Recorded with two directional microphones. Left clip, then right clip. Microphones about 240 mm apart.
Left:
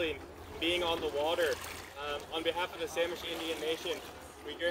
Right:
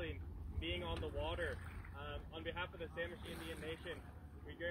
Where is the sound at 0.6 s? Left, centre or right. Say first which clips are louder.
Left 13 dB; left.